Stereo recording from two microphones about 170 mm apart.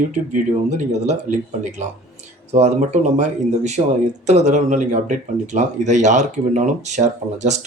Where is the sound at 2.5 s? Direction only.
40° right (ahead or behind).